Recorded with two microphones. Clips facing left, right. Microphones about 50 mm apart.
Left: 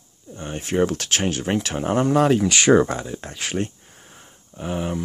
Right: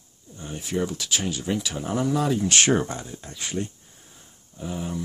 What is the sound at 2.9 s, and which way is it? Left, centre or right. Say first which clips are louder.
Speech: left 7 dB; left.